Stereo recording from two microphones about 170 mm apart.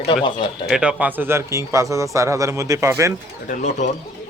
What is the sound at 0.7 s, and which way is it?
Speech, 5° right (ahead or behind).